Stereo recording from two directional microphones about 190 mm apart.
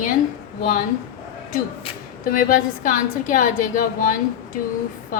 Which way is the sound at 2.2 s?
45° left (ahead or behind).